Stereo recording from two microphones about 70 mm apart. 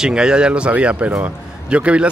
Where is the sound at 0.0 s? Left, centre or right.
Centre.